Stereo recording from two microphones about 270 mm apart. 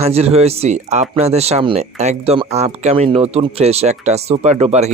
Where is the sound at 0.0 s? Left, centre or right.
Right.